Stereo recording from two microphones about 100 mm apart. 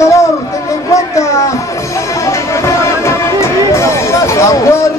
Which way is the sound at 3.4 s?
30° left (ahead or behind).